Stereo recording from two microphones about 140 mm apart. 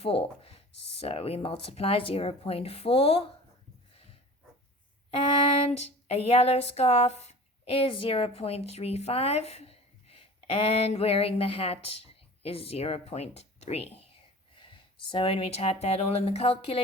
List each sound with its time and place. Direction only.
0.0 s speech: 45° left (ahead or behind)
5.1 s a sound: 45° left (ahead or behind)
12.4 s speech: 45° left (ahead or behind)
14.5 s speech: 35° left (ahead or behind)